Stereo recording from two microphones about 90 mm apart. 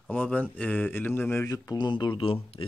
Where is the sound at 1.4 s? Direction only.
40° left (ahead or behind).